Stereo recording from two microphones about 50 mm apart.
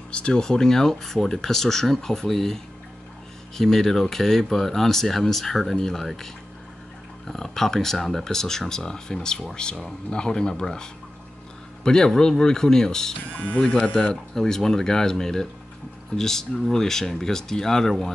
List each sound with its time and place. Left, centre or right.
0.1 s speech: centre